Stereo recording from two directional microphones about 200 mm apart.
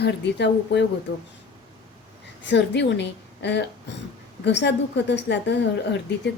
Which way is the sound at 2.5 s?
60° left (ahead or behind).